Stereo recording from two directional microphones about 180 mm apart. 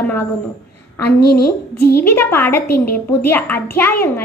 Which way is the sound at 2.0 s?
10° left (ahead or behind).